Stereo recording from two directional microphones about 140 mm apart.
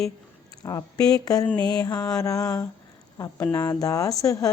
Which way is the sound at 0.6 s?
25° left (ahead or behind).